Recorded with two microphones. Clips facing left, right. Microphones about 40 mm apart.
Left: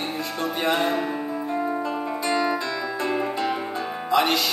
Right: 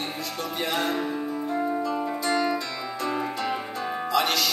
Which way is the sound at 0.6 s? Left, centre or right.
Left.